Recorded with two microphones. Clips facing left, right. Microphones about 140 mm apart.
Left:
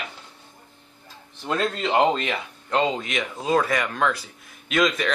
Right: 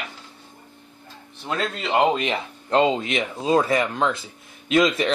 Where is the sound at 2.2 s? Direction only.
25° right (ahead or behind).